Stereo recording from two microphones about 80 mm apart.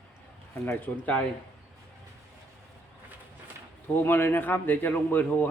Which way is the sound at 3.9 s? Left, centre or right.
Left.